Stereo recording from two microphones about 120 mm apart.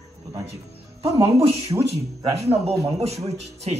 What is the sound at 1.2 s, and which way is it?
Speech, 55° right (ahead or behind).